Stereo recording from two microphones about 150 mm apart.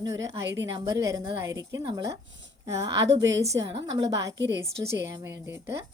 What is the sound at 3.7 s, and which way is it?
Speech, 35° right (ahead or behind).